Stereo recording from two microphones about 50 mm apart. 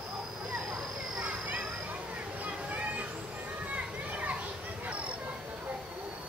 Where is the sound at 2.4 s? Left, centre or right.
Right.